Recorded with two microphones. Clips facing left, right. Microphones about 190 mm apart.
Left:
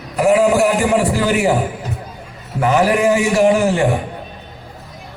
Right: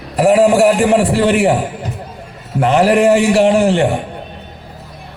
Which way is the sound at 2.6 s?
30° right (ahead or behind).